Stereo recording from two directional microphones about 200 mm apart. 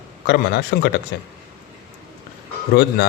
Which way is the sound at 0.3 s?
55° left (ahead or behind).